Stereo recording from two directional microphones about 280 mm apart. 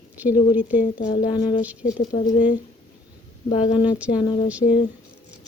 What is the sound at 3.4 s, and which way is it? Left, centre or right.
Speech, centre.